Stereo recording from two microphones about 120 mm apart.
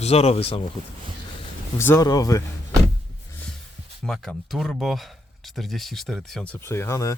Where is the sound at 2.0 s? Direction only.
30° left (ahead or behind).